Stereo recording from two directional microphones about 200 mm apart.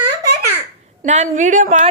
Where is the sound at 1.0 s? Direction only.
35° right (ahead or behind).